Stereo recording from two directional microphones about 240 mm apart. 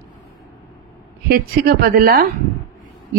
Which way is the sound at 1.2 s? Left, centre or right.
Right.